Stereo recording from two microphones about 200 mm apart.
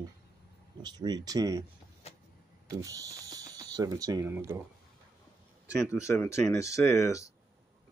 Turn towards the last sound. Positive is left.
turn(degrees=15)  # may be behind; listen again after turning